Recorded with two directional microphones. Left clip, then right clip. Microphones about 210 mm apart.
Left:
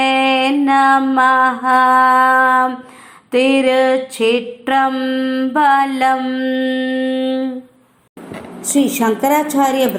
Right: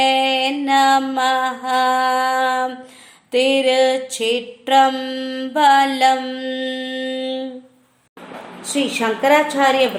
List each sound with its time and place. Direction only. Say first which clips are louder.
0.0 s mantra: left 2 dB; 5° right (ahead or behind)
2.0 s mantra: left 6 dB; 5° right (ahead or behind)
8.6 s a woman's voice: left 4 dB; 20° left (ahead or behind)